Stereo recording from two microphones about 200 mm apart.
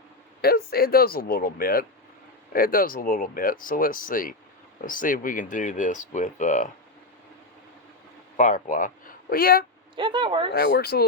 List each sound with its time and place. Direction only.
0.4 s speech: 50° left (ahead or behind)
8.4 s speech: 40° left (ahead or behind)
9.9 s a woman's voice: 25° right (ahead or behind)
10.5 s speech: 55° left (ahead or behind)